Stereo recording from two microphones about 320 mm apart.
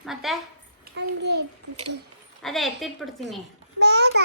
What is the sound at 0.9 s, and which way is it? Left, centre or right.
Speech, right.